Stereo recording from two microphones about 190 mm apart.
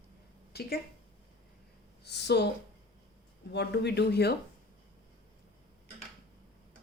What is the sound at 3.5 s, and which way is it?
Speech, 60° left (ahead or behind).